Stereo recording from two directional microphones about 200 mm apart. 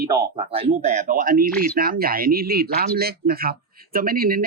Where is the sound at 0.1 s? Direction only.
30° right (ahead or behind).